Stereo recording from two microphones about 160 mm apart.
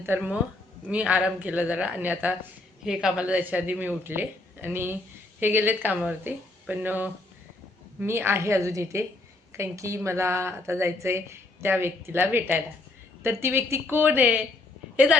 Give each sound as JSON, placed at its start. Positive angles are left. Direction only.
{"t": 0.0, "sound": "a woman's voice", "side_deg": -10}